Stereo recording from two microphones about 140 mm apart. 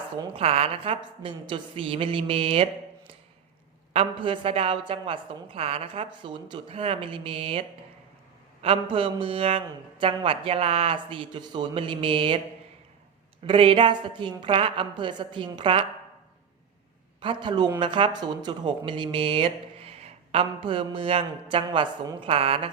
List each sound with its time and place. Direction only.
0.3 s speech: 45° right (ahead or behind)
3.9 s speech: 40° right (ahead or behind)
8.6 s speech: 40° right (ahead or behind)
13.5 s speech: 40° right (ahead or behind)
17.2 s speech: 35° right (ahead or behind)